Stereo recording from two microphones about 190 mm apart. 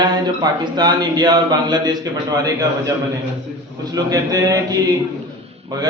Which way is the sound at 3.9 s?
20° right (ahead or behind).